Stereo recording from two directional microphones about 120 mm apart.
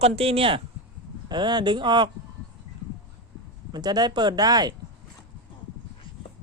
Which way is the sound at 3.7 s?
35° right (ahead or behind).